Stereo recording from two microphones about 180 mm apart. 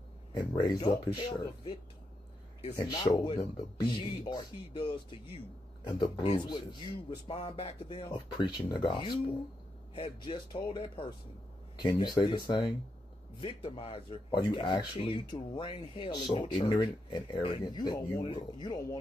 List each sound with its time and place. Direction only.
0.3 s speech: 25° left (ahead or behind)
2.7 s speech: 20° left (ahead or behind)